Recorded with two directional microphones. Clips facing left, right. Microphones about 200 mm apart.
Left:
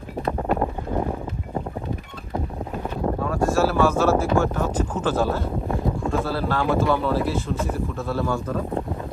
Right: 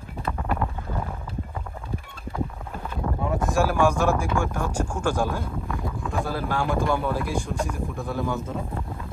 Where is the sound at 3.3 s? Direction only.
15° right (ahead or behind).